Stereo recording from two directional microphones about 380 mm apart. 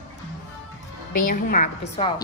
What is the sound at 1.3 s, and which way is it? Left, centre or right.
Speech, left.